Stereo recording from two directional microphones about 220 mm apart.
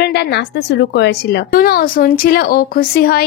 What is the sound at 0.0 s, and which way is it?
A woman's voice, 50° left (ahead or behind).